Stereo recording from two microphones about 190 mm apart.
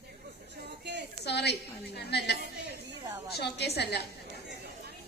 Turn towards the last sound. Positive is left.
turn(degrees=60)  # may be behind; listen again after turning